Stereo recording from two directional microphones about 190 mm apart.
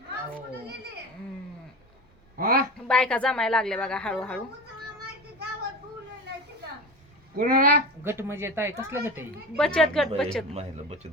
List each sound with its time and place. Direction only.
2.4 s a woman's voice: 50° right (ahead or behind)
2.8 s a woman's voice: 5° left (ahead or behind)
7.3 s speech: 50° right (ahead or behind)
8.0 s speech: 15° right (ahead or behind)
9.6 s a woman's voice: 5° left (ahead or behind)
10.5 s speech: 35° right (ahead or behind)